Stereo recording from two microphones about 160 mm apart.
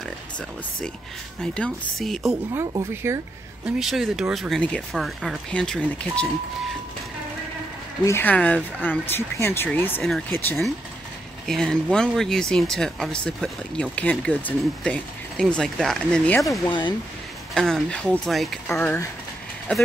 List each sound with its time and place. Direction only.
1.4 s speech: 5° left (ahead or behind)
2.5 s speech: 15° right (ahead or behind)
3.6 s speech: centre (ahead or behind)
8.0 s speech: 15° left (ahead or behind)
10.0 s speech: centre (ahead or behind)
18.7 s speech: 15° left (ahead or behind)